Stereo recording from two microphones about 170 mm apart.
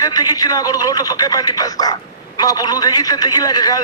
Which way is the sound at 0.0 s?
20° left (ahead or behind).